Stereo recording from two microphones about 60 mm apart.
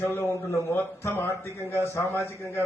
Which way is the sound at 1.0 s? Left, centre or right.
Left.